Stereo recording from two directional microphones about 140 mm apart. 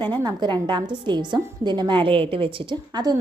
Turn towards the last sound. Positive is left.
turn(degrees=-30)  # may be behind; listen again after turning